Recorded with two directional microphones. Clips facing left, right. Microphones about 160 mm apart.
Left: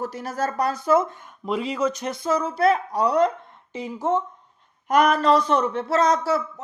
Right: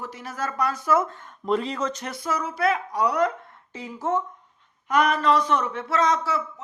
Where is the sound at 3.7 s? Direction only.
20° left (ahead or behind).